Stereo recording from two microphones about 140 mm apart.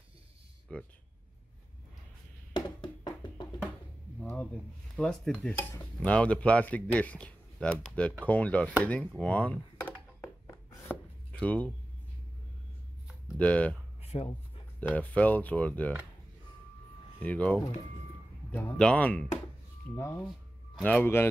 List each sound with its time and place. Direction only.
0.7 s speech: 5° left (ahead or behind)
2.5 s music: 30° left (ahead or behind)
4.9 s speech: 5° left (ahead or behind)
9.2 s a sound: 10° left (ahead or behind)
10.7 s chopping: 10° left (ahead or behind)
13.4 s speech: 10° left (ahead or behind)
14.0 s a sound: 45° left (ahead or behind)
14.8 s speech: 10° left (ahead or behind)
17.2 s speech: 10° left (ahead or behind)